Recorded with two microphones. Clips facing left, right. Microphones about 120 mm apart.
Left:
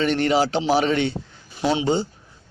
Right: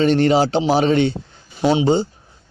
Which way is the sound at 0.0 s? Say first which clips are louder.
Right 5 dB; 30° right (ahead or behind).